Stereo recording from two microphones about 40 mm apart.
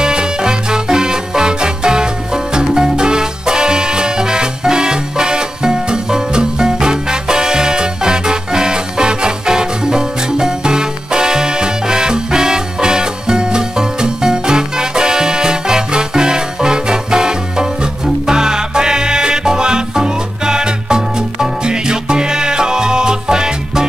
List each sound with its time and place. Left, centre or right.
0.0 s music: centre